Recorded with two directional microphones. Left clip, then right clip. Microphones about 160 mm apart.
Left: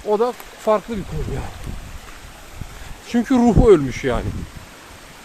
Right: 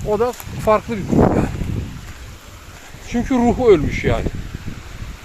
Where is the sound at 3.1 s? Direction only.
25° left (ahead or behind).